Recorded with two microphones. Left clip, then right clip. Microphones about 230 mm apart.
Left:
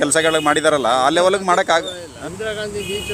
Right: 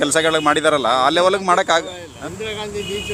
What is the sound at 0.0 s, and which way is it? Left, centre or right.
Speech, centre.